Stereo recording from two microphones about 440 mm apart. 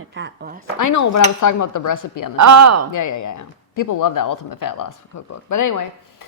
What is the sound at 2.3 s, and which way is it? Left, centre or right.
Speech, right.